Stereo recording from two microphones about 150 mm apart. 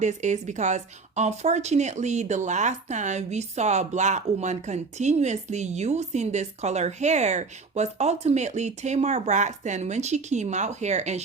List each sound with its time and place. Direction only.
0.0 s a woman's voice: 50° right (ahead or behind)